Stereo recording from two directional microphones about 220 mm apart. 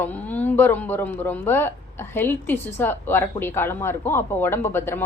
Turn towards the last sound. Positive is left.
turn(degrees=10)  # may be behind; listen again after turning